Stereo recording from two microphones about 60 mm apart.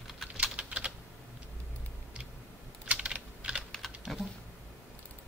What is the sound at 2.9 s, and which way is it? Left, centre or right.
Typing, centre.